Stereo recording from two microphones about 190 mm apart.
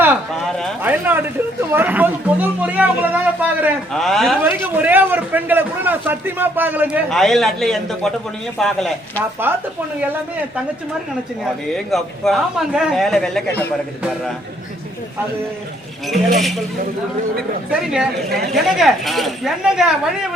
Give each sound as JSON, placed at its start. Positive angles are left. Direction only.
{"t": 0.8, "sound": "a man's voice", "side_deg": -10}
{"t": 4.4, "sound": "a man's voice", "side_deg": -10}
{"t": 7.1, "sound": "a man's voice", "side_deg": 0}
{"t": 9.4, "sound": "a man's voice", "side_deg": -10}
{"t": 17.7, "sound": "a man's voice", "side_deg": -5}